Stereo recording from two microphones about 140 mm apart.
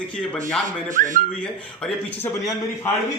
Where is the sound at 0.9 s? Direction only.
65° right (ahead or behind).